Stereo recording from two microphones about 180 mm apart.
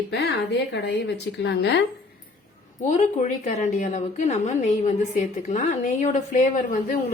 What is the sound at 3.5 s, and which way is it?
A woman's voice, 40° left (ahead or behind).